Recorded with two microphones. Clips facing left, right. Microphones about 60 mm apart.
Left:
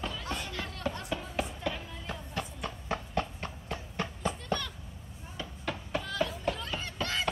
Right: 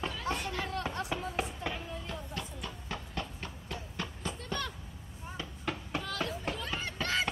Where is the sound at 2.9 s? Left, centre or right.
Left.